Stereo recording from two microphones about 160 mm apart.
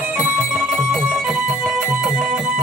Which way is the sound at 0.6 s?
Centre (ahead or behind).